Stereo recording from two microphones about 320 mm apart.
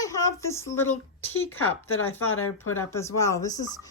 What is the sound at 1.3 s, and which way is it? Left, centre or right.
Speech, left.